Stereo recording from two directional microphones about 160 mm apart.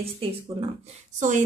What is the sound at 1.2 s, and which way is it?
Speech, 50° right (ahead or behind).